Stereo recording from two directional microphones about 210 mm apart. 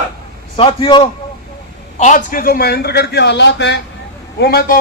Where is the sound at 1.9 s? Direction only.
35° left (ahead or behind).